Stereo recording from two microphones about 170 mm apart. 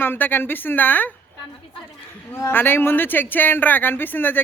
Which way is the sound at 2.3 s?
10° left (ahead or behind).